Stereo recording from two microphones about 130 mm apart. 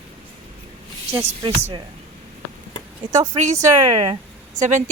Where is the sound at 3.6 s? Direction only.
35° right (ahead or behind).